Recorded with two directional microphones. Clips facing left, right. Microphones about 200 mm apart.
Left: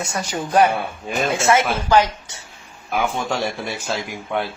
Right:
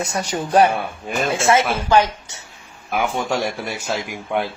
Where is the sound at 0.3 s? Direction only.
35° right (ahead or behind).